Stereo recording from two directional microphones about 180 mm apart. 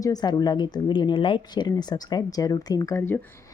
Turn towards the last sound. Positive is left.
turn(degrees=15)  # may be behind; listen again after turning